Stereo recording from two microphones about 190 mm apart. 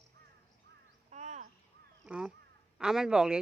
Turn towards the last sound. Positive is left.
turn(degrees=-5)  # may be behind; listen again after turning